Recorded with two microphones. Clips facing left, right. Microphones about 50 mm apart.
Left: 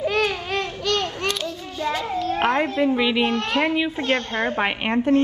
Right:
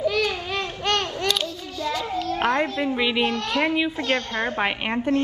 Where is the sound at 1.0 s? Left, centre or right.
Left.